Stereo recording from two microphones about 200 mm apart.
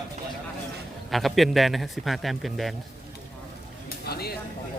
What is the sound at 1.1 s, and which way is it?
A man's voice, centre (ahead or behind).